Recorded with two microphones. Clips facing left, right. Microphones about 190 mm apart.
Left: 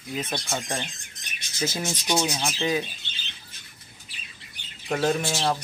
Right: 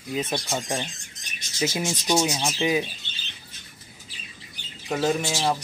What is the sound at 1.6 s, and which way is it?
Speech, 15° right (ahead or behind).